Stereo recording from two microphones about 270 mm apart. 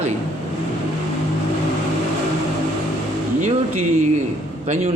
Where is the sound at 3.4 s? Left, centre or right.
Right.